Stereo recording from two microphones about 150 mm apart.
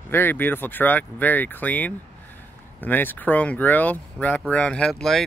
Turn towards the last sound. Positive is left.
turn(degrees=5)  # may be behind; listen again after turning